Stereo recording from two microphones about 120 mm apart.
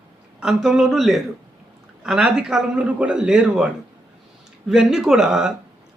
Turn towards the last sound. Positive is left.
turn(degrees=-5)  # may be behind; listen again after turning